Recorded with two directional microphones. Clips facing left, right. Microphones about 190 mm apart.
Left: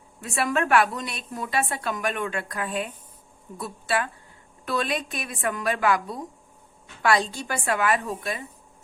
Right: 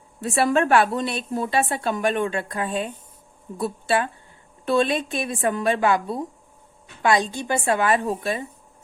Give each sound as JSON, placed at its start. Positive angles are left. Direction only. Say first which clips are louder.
{"t": 0.2, "sound": "a woman's voice", "louder": "right 5 dB", "side_deg": -35}